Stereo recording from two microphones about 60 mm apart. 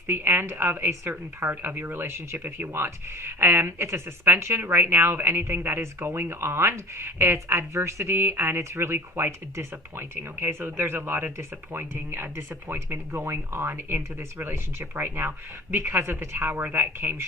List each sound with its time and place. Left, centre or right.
0.1 s speech: right
7.8 s speech: right